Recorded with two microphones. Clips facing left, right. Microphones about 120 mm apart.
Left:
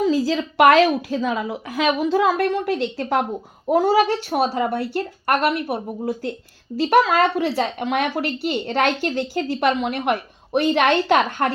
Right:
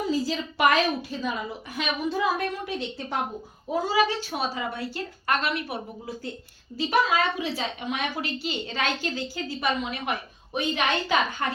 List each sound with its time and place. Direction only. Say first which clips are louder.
0.1 s a woman's voice: left 7 dB; 90° left
3.7 s a woman's voice: left 7 dB; 65° left (ahead or behind)
6.9 s a woman's voice: left 7 dB; 70° left (ahead or behind)